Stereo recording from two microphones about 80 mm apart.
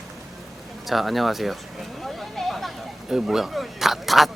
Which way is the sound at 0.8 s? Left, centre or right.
Centre.